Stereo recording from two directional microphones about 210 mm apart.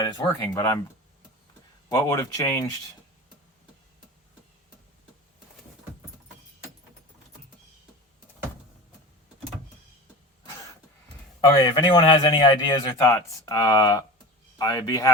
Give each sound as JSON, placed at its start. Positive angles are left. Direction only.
{"t": 0.0, "sound": "speech", "side_deg": 15}
{"t": 1.9, "sound": "speech", "side_deg": 15}
{"t": 10.4, "sound": "cough", "side_deg": 15}
{"t": 11.3, "sound": "a man's voice", "side_deg": 20}